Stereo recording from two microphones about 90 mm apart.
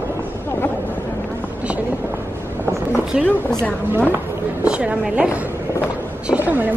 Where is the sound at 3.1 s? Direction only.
10° right (ahead or behind).